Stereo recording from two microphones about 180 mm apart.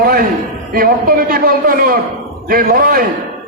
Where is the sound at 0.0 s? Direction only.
55° right (ahead or behind).